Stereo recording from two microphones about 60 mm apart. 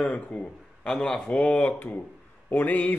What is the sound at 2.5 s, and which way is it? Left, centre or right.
Speech, left.